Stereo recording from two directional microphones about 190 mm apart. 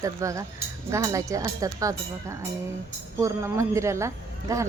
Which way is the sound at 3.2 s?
15° right (ahead or behind).